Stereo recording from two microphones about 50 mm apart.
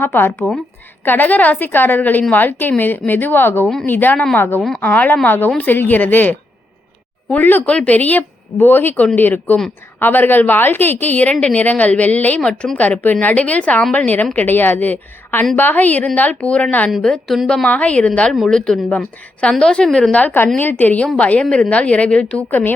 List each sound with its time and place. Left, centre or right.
0.0 s speech: left
1.0 s a woman's voice: left
7.3 s a woman's voice: left
8.5 s a woman's voice: left
12.4 s a woman's voice: centre
12.7 s a woman's voice: left
17.2 s a woman's voice: centre
17.7 s a woman's voice: left; by 20.1 s centre
20.1 s a woman's voice: left
21.2 s a woman's voice: left